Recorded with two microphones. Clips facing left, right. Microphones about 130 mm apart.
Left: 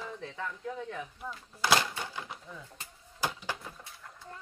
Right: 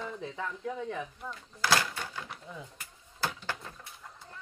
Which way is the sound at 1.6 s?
20° left (ahead or behind).